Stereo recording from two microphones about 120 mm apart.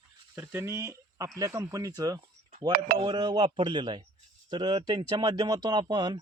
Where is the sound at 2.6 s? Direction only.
45° right (ahead or behind).